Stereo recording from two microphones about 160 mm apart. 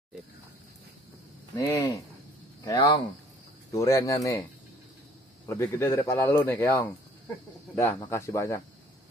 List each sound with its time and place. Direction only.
1.6 s speech: 20° left (ahead or behind)
5.5 s speech: 15° left (ahead or behind)